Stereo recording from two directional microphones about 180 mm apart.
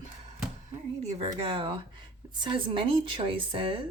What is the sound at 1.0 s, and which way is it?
A woman's voice, 30° right (ahead or behind).